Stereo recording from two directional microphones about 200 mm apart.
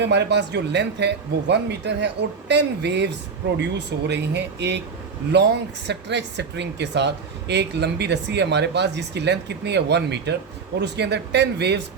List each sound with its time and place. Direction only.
0.0 s speech: 60° right (ahead or behind)